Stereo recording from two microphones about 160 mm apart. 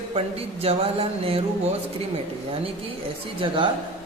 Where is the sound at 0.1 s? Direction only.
40° right (ahead or behind).